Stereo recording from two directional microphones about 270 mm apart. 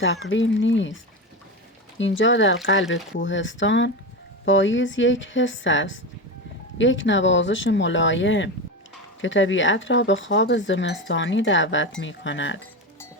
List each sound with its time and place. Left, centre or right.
0.0 s speech: left
2.0 s speech: left